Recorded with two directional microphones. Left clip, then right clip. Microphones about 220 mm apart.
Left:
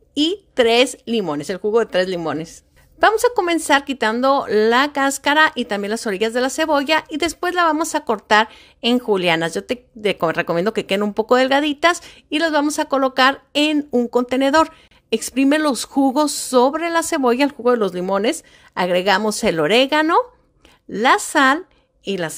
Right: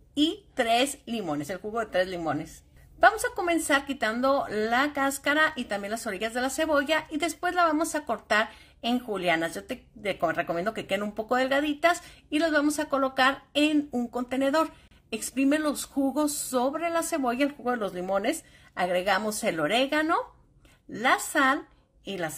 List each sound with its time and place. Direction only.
0.1 s a woman's voice: 45° left (ahead or behind)